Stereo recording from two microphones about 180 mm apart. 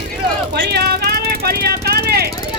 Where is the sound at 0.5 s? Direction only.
65° right (ahead or behind).